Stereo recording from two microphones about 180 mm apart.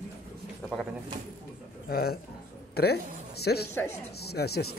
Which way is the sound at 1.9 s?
60° left (ahead or behind).